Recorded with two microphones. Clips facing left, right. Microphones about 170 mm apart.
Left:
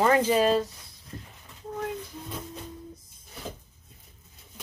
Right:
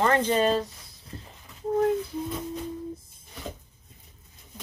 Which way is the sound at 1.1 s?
30° right (ahead or behind).